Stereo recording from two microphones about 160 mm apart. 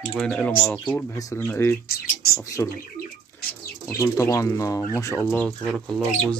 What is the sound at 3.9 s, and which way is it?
Speech, 20° left (ahead or behind).